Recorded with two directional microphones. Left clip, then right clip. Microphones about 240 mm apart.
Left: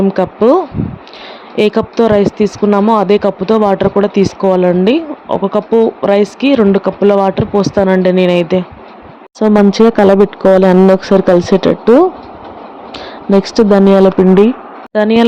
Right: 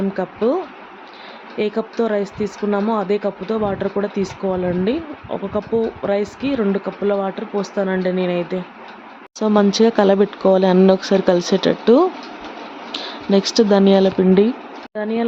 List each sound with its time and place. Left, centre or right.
0.1 s speech: left
14.9 s speech: left